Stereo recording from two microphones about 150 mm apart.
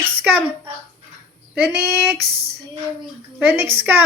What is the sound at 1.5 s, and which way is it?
Speech, 10° right (ahead or behind).